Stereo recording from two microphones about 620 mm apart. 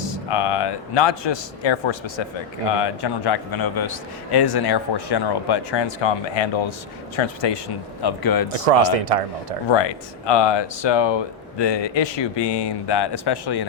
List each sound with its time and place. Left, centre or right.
0.3 s a man's voice: left
8.6 s speech: right
9.6 s speech: left